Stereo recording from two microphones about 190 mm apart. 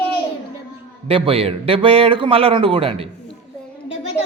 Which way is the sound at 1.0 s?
30° right (ahead or behind).